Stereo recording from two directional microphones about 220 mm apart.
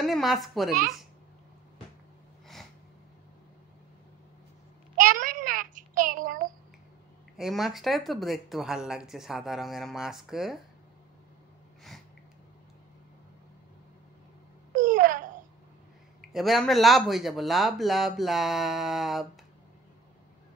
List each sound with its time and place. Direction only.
0.0 s speech: centre (ahead or behind)
4.9 s child singing: 35° right (ahead or behind)
7.3 s speech: centre (ahead or behind)
14.7 s wail: 35° right (ahead or behind)
16.2 s speech: centre (ahead or behind)